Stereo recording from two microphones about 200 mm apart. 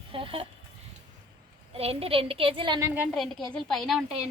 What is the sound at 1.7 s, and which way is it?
A woman's voice, 30° right (ahead or behind).